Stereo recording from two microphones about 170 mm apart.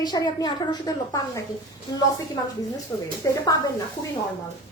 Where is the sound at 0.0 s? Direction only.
20° left (ahead or behind).